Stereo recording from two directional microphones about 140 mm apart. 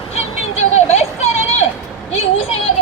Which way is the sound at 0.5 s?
45° left (ahead or behind).